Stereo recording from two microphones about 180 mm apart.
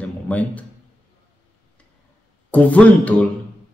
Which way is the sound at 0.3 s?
10° left (ahead or behind).